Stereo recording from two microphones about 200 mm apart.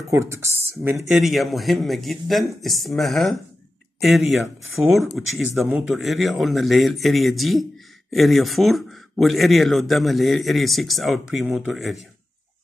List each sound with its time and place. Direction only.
0.1 s speech: 15° right (ahead or behind)
1.0 s speech: centre (ahead or behind)